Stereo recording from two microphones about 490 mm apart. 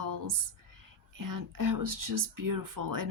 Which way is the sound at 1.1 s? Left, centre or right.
Right.